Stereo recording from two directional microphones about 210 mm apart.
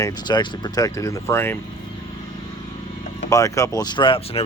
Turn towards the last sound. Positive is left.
turn(degrees=25)  # may be behind; listen again after turning